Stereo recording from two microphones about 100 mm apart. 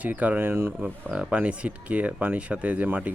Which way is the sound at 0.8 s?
10° right (ahead or behind).